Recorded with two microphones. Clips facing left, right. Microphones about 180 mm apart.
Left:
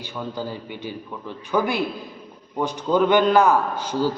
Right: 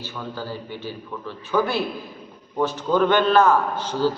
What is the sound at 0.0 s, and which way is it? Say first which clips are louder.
A man's voice: left 2 dB; 15° left (ahead or behind).